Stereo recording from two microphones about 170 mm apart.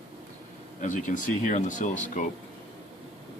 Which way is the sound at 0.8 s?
50° left (ahead or behind).